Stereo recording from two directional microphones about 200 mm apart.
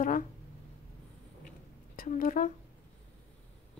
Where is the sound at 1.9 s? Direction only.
45° left (ahead or behind).